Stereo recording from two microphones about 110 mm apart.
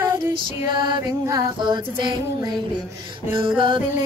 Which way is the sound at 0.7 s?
45° right (ahead or behind).